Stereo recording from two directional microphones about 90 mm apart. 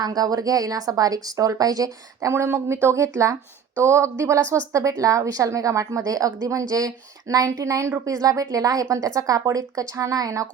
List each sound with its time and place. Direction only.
0.0 s a woman's voice: 45° right (ahead or behind)